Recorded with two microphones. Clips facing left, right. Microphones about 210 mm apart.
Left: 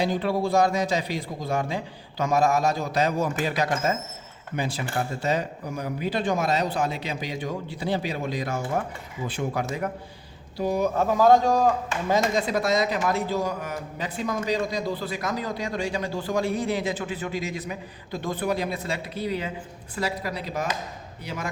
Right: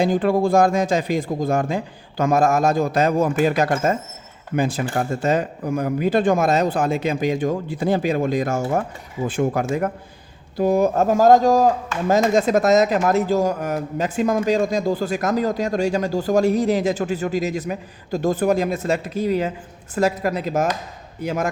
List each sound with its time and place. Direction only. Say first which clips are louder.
0.0 s a man's voice: right 7 dB; 50° right (ahead or behind)